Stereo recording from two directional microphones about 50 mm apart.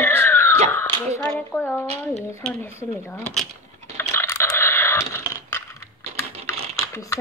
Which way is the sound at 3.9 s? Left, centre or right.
Left.